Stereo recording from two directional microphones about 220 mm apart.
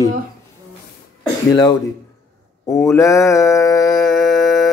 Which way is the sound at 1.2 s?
20° left (ahead or behind).